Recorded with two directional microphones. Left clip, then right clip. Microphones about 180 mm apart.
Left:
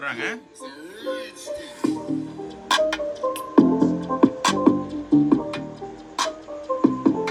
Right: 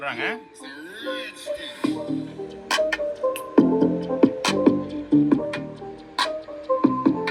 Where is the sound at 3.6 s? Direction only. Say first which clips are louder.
Left 1 dB; 25° left (ahead or behind).